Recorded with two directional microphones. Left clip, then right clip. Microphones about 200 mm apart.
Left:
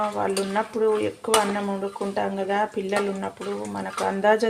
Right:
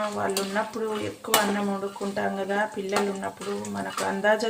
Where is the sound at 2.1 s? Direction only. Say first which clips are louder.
Left 2 dB; 35° left (ahead or behind).